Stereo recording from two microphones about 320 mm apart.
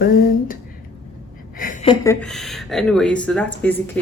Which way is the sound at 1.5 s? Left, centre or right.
Left.